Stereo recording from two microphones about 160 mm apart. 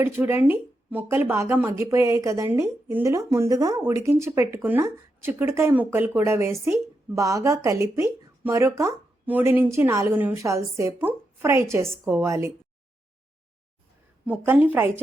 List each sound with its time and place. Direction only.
0.0 s speech: 15° right (ahead or behind)
14.3 s speech: 10° right (ahead or behind)